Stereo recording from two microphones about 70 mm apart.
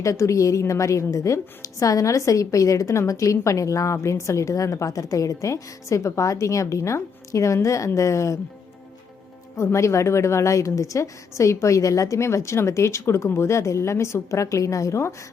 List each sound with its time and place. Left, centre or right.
0.0 s a woman's voice: left
9.6 s a woman's voice: left